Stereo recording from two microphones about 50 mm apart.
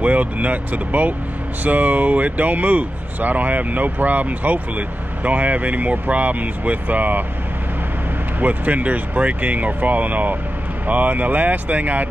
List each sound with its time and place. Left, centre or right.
0.0 s speech: right
8.4 s speech: right